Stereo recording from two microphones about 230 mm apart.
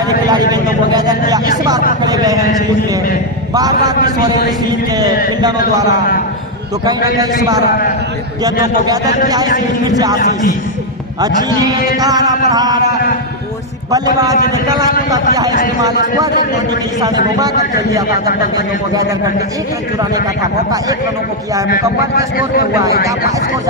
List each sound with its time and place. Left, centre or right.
0.3 s vehicle: centre
2.0 s a sound: centre
3.5 s a man's voice: centre
9.8 s a man's voice: centre
11.2 s a man's voice: centre
13.9 s a man's voice: centre
20.0 s a man's voice: centre